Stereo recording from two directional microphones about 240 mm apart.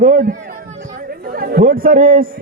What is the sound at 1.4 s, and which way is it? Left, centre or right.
Speech, right.